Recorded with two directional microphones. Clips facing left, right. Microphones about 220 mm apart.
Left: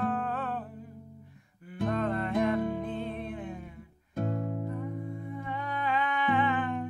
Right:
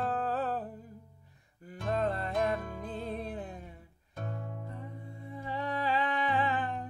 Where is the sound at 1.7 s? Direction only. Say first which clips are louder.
Left 2 dB; 35° right (ahead or behind).